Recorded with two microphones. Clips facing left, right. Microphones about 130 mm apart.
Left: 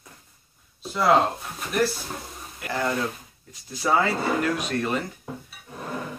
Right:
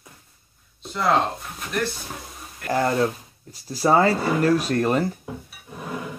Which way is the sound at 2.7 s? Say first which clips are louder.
Right 5 dB; 40° right (ahead or behind).